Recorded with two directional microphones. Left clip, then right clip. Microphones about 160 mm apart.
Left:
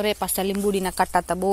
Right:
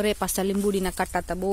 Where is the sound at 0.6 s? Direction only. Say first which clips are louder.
Left 3 dB; 15° right (ahead or behind).